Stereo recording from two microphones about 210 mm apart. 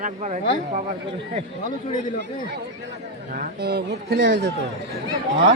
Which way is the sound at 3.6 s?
50° right (ahead or behind).